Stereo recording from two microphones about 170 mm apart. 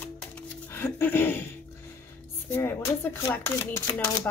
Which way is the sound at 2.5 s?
15° left (ahead or behind).